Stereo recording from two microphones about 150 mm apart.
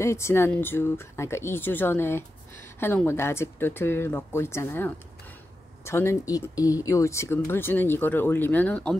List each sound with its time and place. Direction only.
0.0 s speech: 20° left (ahead or behind)